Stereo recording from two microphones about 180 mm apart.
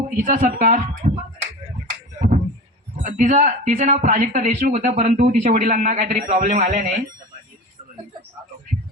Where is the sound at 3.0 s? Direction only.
45° right (ahead or behind).